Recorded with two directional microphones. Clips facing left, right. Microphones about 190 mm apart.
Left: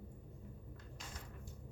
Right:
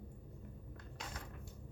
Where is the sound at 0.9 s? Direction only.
65° right (ahead or behind).